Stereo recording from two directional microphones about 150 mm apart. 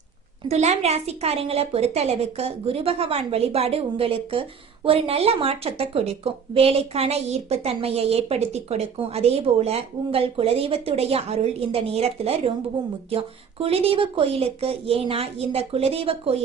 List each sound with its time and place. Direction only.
0.4 s a woman's voice: 50° right (ahead or behind)